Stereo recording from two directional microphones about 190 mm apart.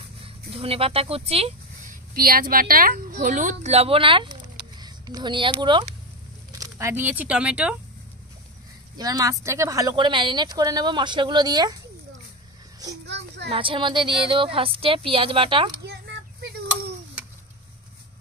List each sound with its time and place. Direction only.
0.5 s speech: 30° right (ahead or behind)
2.1 s a woman's voice: 50° right (ahead or behind); by 5.9 s 25° right (ahead or behind)
6.6 s speech: 15° right (ahead or behind)
8.9 s speech: 20° right (ahead or behind)
13.0 s a sound: 65° right (ahead or behind)
13.5 s speech: 25° right (ahead or behind)
15.8 s a sound: 60° right (ahead or behind)